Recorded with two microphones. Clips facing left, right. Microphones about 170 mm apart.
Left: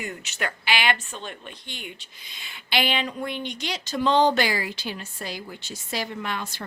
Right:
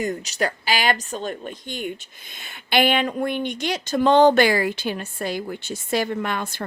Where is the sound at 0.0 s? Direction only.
40° right (ahead or behind).